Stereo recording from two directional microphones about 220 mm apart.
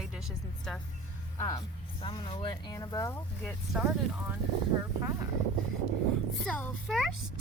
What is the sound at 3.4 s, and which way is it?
Speech, centre (ahead or behind).